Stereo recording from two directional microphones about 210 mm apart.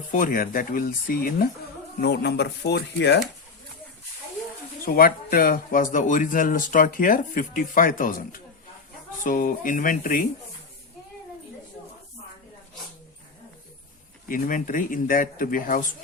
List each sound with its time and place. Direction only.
0.1 s speech: 40° left (ahead or behind)
4.9 s speech: 45° left (ahead or behind)
14.3 s speech: 40° left (ahead or behind)